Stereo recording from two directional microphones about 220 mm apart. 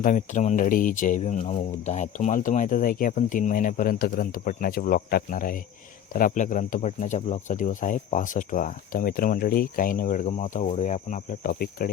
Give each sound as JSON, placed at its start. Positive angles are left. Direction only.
{"t": 0.0, "sound": "speech", "side_deg": 35}